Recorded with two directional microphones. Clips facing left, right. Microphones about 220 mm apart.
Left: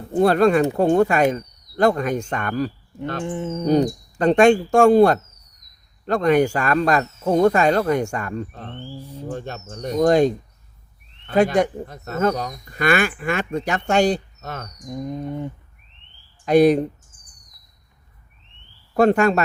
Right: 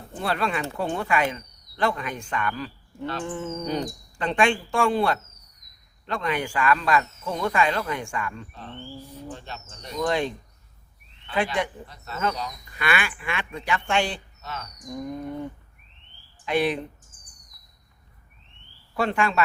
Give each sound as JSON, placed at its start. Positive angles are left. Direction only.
{"t": 0.1, "sound": "speech", "side_deg": 45}
{"t": 3.2, "sound": "speech", "side_deg": 20}
{"t": 3.7, "sound": "speech", "side_deg": 45}
{"t": 14.8, "sound": "speech", "side_deg": 20}
{"t": 16.5, "sound": "speech", "side_deg": 40}
{"t": 18.9, "sound": "speech", "side_deg": 45}